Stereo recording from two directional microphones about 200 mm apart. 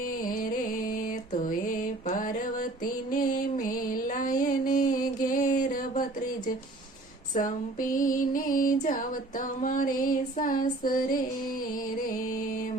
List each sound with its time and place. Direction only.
0.1 s music: 45° left (ahead or behind)
1.0 s mantra: 40° left (ahead or behind)
3.1 s music: 45° left (ahead or behind)
7.3 s music: 40° left (ahead or behind)